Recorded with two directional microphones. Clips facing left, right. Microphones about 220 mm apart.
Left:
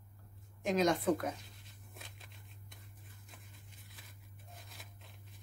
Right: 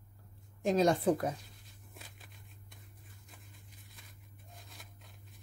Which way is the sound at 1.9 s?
Centre (ahead or behind).